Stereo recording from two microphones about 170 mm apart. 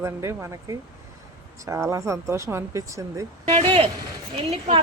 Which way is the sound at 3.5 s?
35° right (ahead or behind).